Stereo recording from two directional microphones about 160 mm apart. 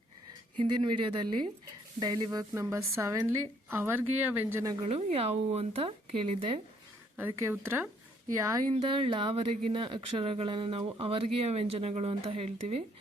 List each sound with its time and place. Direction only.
0.5 s speech: 30° right (ahead or behind)
2.0 s a sound: 25° right (ahead or behind)
2.5 s a woman's voice: 20° right (ahead or behind)
4.7 s speech: 35° right (ahead or behind)
7.2 s a woman's voice: 15° right (ahead or behind)
8.3 s a sound: 20° right (ahead or behind)
8.7 s speech: 35° right (ahead or behind)